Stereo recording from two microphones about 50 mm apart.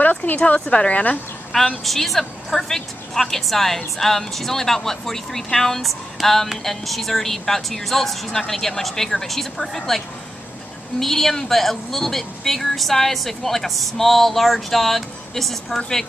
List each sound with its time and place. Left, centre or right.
0.0 s speech: left
1.5 s a woman's voice: centre